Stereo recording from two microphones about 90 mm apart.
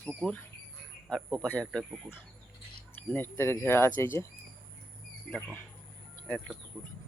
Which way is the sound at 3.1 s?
25° left (ahead or behind).